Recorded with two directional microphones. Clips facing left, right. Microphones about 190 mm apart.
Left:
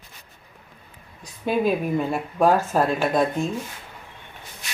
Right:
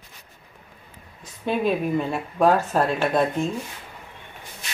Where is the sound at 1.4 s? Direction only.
5° left (ahead or behind).